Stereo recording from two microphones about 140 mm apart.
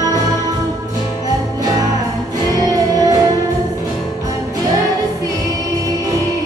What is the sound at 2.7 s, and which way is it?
Music, 25° right (ahead or behind).